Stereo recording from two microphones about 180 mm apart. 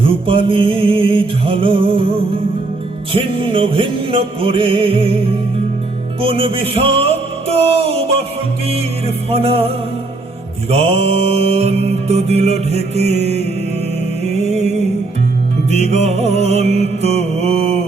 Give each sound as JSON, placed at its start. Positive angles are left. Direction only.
{"t": 0.0, "sound": "music", "side_deg": -30}
{"t": 6.2, "sound": "mantra", "side_deg": -30}
{"t": 15.7, "sound": "mantra", "side_deg": -40}